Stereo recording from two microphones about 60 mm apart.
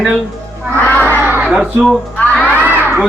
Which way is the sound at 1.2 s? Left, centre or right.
Right.